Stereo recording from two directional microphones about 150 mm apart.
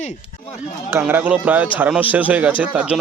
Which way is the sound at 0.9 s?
15° right (ahead or behind).